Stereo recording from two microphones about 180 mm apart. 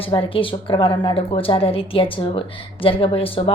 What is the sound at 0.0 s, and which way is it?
Speech, 30° left (ahead or behind).